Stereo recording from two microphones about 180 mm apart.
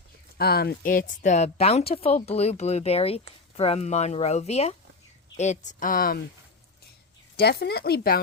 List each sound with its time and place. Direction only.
0.3 s speech: 60° left (ahead or behind)
7.3 s speech: 65° left (ahead or behind)